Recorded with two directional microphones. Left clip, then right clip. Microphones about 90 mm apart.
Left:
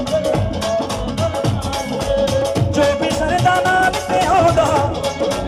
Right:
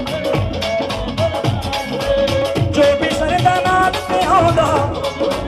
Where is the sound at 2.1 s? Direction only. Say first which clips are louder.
Even; 50° left (ahead or behind).